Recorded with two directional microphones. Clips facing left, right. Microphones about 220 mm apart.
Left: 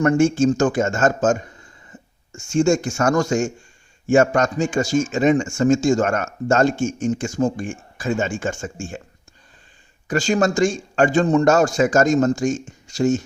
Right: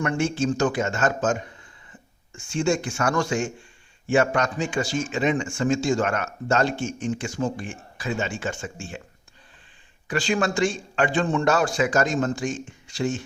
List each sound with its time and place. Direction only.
0.0 s a man's voice: 45° left (ahead or behind)
10.1 s a man's voice: 45° left (ahead or behind)